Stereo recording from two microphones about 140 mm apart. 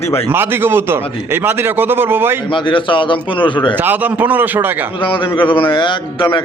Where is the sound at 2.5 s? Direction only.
35° left (ahead or behind).